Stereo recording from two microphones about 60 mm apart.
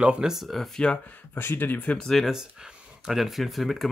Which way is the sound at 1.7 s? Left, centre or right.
Left.